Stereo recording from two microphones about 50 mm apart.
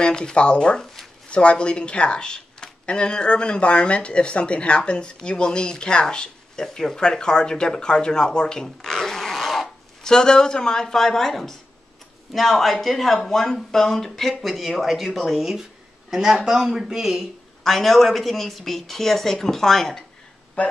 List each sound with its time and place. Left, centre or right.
0.0 s speech: centre
14.4 s speech: centre
17.6 s speech: centre
20.6 s speech: left